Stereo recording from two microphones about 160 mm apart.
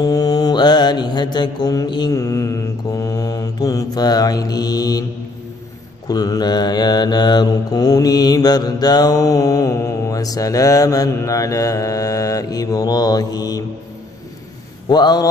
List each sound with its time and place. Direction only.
0.0 s mantra: 25° left (ahead or behind)
6.0 s mantra: 25° left (ahead or behind)
14.9 s mantra: 25° left (ahead or behind)